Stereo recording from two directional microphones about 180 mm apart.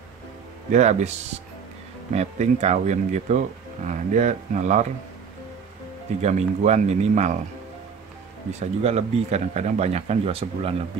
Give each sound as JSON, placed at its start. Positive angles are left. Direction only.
{"t": 0.7, "sound": "speech", "side_deg": -40}
{"t": 2.1, "sound": "speech", "side_deg": -40}
{"t": 6.2, "sound": "speech", "side_deg": -40}
{"t": 8.5, "sound": "speech", "side_deg": -40}